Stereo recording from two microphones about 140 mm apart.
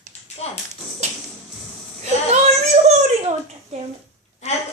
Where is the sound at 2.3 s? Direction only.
55° right (ahead or behind).